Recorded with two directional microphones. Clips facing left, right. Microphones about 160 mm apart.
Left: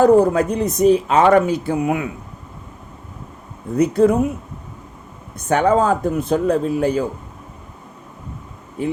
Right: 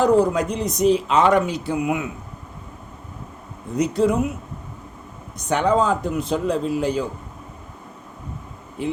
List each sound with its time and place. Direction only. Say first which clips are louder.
0.0 s speech: left 4 dB; 55° left (ahead or behind)
3.8 s speech: left 5 dB; 55° left (ahead or behind)
5.4 s speech: left 3 dB; 50° left (ahead or behind)